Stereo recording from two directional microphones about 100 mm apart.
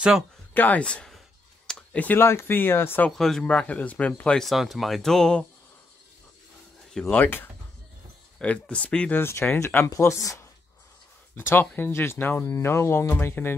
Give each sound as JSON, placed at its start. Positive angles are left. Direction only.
{"t": 0.6, "sound": "speech", "side_deg": 15}
{"t": 3.1, "sound": "speech", "side_deg": 5}
{"t": 6.9, "sound": "speech", "side_deg": 5}
{"t": 7.2, "sound": "speech", "side_deg": 20}
{"t": 9.8, "sound": "speech", "side_deg": 30}
{"t": 11.3, "sound": "speech", "side_deg": 20}